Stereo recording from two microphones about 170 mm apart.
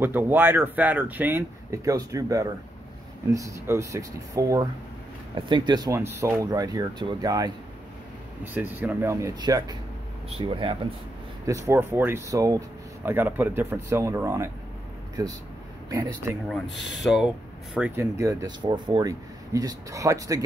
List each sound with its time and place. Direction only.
0.0 s speech: 10° right (ahead or behind)
8.7 s speech: 15° right (ahead or behind); by 10.8 s 30° right (ahead or behind)
11.4 s speech: 15° right (ahead or behind)
15.9 s speech: 20° right (ahead or behind)
16.4 s speech: centre (ahead or behind)
18.2 s speech: 25° right (ahead or behind)